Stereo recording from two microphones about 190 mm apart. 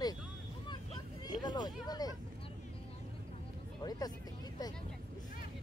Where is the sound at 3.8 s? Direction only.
20° left (ahead or behind).